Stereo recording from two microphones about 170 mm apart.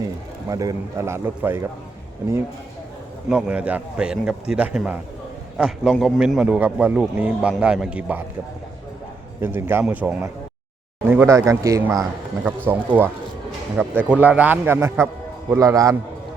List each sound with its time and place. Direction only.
0.4 s a man's voice: 20° right (ahead or behind)
3.2 s a man's voice: 5° right (ahead or behind)
9.4 s a man's voice: 15° right (ahead or behind)
12.5 s a man's voice: 10° right (ahead or behind)